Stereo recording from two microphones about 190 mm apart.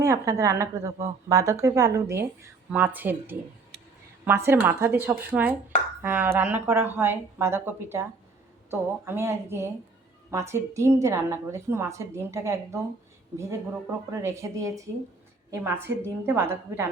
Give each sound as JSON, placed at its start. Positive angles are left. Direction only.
{"t": 0.0, "sound": "a woman's voice", "side_deg": -15}